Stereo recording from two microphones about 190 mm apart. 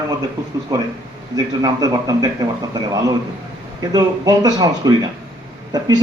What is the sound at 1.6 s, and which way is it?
Speech, 15° right (ahead or behind).